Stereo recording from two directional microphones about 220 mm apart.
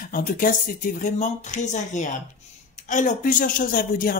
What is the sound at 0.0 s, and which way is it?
Speech, 40° left (ahead or behind).